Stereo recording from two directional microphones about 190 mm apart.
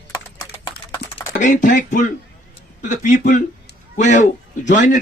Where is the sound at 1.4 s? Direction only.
40° left (ahead or behind).